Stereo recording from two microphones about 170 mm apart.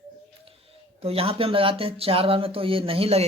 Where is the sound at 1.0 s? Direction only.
35° right (ahead or behind).